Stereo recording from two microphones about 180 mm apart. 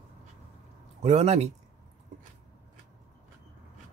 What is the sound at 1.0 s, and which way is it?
Speech, 35° right (ahead or behind).